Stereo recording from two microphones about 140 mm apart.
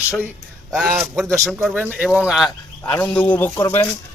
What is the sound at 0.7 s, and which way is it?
Speech, 5° right (ahead or behind).